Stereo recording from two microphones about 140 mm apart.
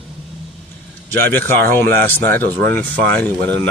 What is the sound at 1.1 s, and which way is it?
Speech, 15° left (ahead or behind).